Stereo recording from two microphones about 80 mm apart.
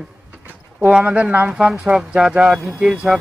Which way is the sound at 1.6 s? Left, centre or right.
Centre.